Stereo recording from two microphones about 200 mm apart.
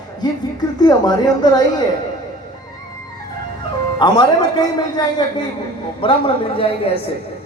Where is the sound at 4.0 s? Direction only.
20° left (ahead or behind).